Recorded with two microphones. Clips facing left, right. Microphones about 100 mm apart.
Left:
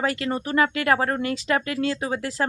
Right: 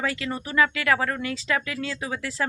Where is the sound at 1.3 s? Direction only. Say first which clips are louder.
Left 3 dB; 50° left (ahead or behind).